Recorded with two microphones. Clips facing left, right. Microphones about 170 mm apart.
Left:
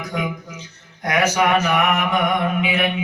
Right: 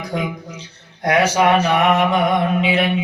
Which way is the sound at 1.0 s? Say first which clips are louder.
Right 3 dB; 30° right (ahead or behind).